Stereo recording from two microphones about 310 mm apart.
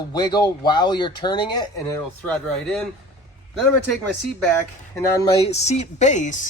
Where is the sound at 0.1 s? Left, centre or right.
Centre.